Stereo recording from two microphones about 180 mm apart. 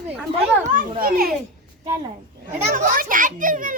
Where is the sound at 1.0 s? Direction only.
55° right (ahead or behind).